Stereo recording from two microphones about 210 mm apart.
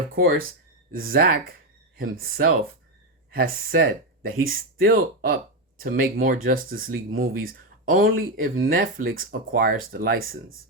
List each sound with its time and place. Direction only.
0.2 s speech: 45° right (ahead or behind)